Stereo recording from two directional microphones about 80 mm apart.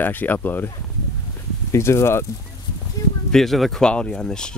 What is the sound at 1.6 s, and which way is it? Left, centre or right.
Speech, left.